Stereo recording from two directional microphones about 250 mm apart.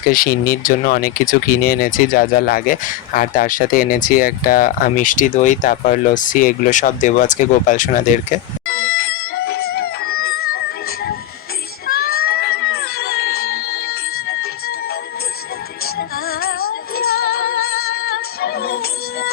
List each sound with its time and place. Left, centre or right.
0.1 s speech: left
8.6 s a sound: left
11.9 s cat: left
15.8 s music: left